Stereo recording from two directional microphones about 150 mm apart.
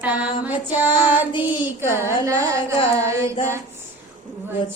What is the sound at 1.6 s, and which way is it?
Speech, 15° right (ahead or behind).